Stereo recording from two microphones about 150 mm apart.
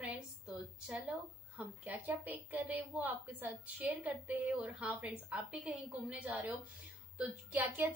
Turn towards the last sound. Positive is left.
turn(degrees=-10)  # may be behind; listen again after turning